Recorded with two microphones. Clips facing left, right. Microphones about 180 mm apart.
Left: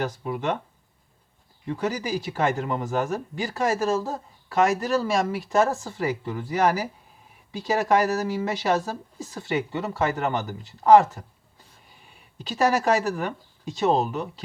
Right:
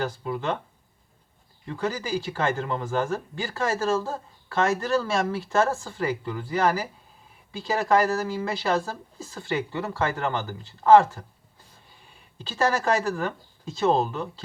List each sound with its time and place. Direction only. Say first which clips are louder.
0.0 s speech: left 1 dB; 20° left (ahead or behind)
1.6 s a woman's voice: left 2 dB; 20° left (ahead or behind)
12.4 s speech: left 2 dB; 20° left (ahead or behind)